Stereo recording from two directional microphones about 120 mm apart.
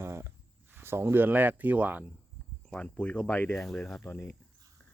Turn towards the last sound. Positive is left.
turn(degrees=15)  # may be behind; listen again after turning